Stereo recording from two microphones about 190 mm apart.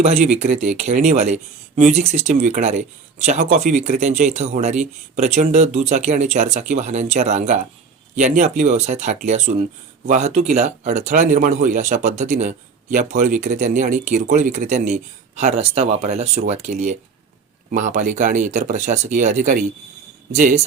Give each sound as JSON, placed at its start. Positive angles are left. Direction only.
{"t": 0.2, "sound": "speech", "side_deg": -35}